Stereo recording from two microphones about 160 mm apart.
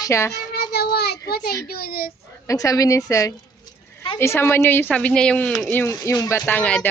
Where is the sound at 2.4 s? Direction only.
20° left (ahead or behind); by 5.7 s 5° left (ahead or behind).